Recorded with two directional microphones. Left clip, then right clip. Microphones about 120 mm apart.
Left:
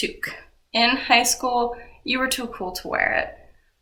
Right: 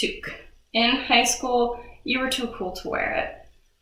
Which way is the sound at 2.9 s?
20° left (ahead or behind).